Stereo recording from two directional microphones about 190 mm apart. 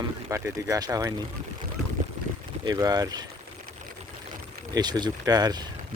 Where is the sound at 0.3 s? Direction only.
15° right (ahead or behind).